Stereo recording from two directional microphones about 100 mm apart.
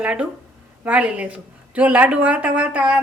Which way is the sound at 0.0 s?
10° right (ahead or behind).